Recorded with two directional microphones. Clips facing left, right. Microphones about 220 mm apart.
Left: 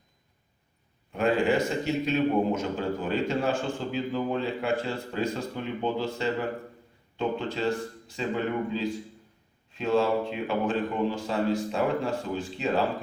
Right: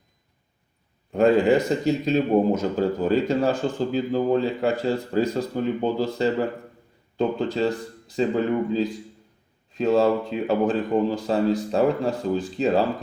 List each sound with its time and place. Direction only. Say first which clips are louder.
1.1 s a man's voice: right 7 dB; 40° right (ahead or behind)
9.7 s a man's voice: right 5 dB; 40° right (ahead or behind)